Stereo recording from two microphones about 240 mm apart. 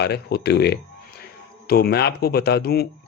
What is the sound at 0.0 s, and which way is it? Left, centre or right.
Speech, left.